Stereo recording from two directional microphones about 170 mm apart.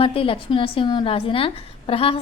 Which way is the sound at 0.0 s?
30° left (ahead or behind).